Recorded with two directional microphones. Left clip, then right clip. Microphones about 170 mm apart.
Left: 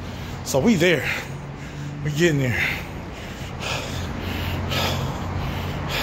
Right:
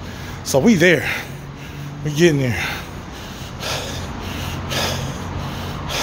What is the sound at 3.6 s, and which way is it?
Snort, 45° right (ahead or behind).